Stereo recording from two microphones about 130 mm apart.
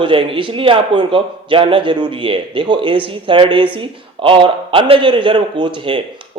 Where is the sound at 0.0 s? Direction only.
40° right (ahead or behind).